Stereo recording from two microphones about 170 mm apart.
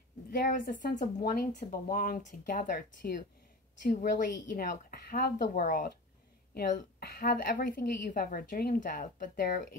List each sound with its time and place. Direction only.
0.3 s a woman's voice: 55° left (ahead or behind)